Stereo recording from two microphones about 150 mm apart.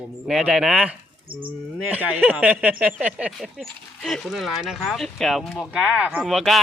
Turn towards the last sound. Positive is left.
turn(degrees=0)  # may be behind; listen again after turning